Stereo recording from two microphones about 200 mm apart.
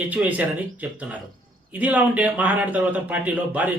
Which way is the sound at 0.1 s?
10° right (ahead or behind).